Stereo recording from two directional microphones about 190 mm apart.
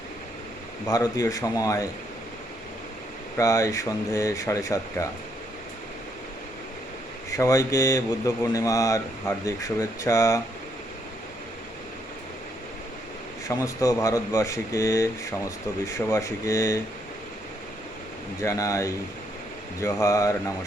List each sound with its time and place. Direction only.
0.9 s speech: 20° left (ahead or behind)
3.3 s speech: 15° left (ahead or behind)
7.3 s speech: 15° left (ahead or behind)
13.5 s speech: 15° left (ahead or behind)
18.4 s speech: 15° left (ahead or behind)